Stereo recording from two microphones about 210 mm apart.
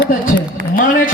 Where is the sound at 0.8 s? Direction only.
40° left (ahead or behind).